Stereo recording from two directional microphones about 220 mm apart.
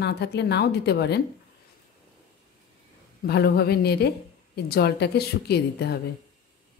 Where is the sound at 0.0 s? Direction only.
50° left (ahead or behind).